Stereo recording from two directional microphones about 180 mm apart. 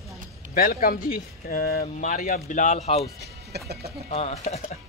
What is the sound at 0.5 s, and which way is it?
Speech, 55° left (ahead or behind).